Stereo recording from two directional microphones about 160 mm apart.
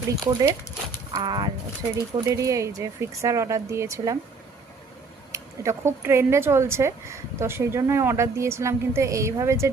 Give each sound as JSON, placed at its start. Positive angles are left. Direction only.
{"t": 0.3, "sound": "speech", "side_deg": -25}
{"t": 5.3, "sound": "speech", "side_deg": -15}